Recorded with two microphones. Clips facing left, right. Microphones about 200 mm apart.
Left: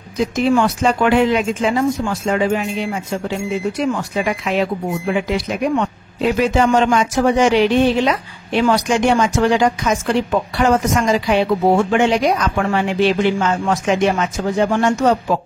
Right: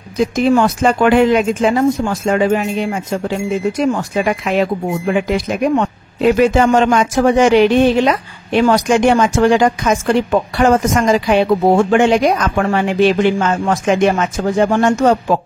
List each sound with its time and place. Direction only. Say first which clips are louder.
0.6 s speech: right 3 dB; 50° right (ahead or behind)